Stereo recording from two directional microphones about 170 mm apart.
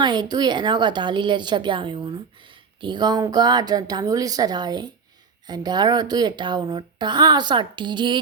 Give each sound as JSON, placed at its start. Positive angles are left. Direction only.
{"t": 0.0, "sound": "a woman's voice", "side_deg": -25}